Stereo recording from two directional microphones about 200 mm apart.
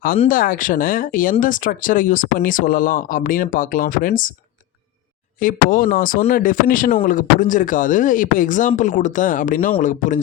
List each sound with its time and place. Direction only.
0.3 s speech: 45° left (ahead or behind)
5.4 s speech: 45° left (ahead or behind)